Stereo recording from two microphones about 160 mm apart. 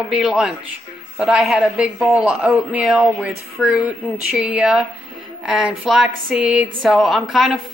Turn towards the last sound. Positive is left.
turn(degrees=0)  # may be behind; listen again after turning